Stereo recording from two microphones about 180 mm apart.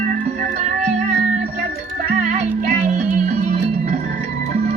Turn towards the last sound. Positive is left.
turn(degrees=-45)  # may be behind; listen again after turning